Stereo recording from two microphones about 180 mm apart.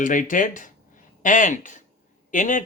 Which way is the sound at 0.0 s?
45° left (ahead or behind).